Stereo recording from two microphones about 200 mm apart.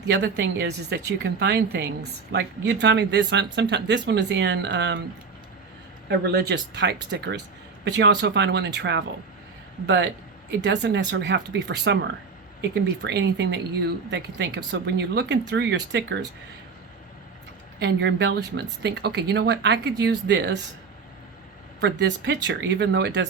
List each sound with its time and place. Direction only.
0.1 s speech: 55° right (ahead or behind)
6.1 s speech: 55° right (ahead or behind)
17.7 s speech: 60° right (ahead or behind)
21.8 s speech: 60° right (ahead or behind)